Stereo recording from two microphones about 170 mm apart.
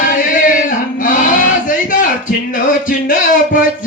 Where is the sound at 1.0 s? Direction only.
50° left (ahead or behind).